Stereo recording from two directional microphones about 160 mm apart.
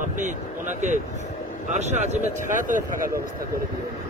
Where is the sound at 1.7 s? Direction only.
45° right (ahead or behind).